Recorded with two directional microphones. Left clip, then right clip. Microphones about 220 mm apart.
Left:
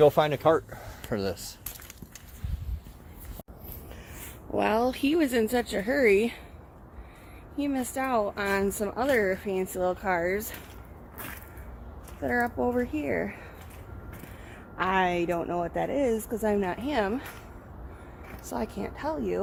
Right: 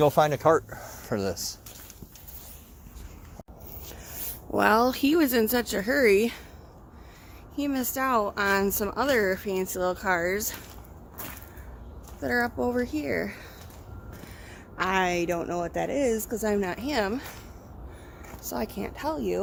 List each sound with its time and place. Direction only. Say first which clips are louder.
0.0 s speech: even; 10° right (ahead or behind)
4.5 s speech: right 4 dB; 20° right (ahead or behind)
7.5 s speech: right 1 dB; 10° right (ahead or behind)
12.2 s speech: even; centre (ahead or behind)
14.8 s speech: even; 5° left (ahead or behind)
18.5 s speech: right 1 dB; 5° right (ahead or behind)